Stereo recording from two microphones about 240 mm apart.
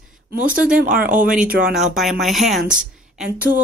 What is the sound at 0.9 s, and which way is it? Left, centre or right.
Speech, right.